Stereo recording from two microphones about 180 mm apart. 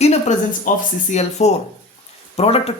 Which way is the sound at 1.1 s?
40° left (ahead or behind).